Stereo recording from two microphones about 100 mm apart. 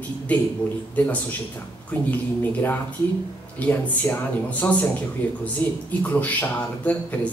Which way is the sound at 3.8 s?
15° left (ahead or behind).